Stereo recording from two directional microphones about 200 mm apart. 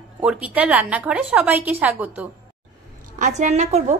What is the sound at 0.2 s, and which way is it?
A woman's voice, 5° right (ahead or behind).